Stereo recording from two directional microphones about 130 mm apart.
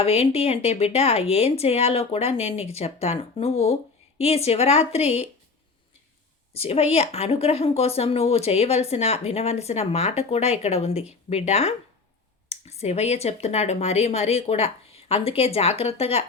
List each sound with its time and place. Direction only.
0.0 s speech: 50° left (ahead or behind)
6.5 s speech: 50° left (ahead or behind)